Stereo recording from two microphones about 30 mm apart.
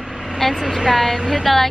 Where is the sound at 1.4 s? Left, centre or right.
Centre.